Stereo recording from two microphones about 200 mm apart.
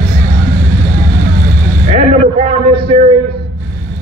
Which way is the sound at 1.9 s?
25° right (ahead or behind).